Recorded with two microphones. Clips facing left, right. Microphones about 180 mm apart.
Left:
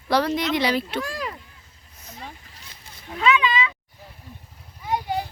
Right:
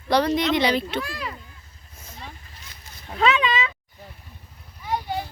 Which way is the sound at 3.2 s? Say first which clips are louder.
Even; 40° right (ahead or behind).